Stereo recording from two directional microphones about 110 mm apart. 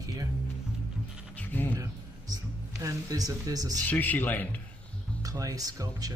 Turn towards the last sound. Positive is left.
turn(degrees=-35)  # may be behind; listen again after turning